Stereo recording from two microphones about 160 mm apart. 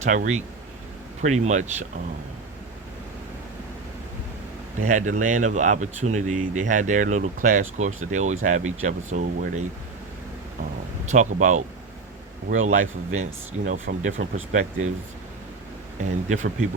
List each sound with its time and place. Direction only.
0.0 s speech: 50° right (ahead or behind)
4.9 s speech: 50° right (ahead or behind)
11.0 s speech: 50° right (ahead or behind)
16.0 s speech: 50° right (ahead or behind)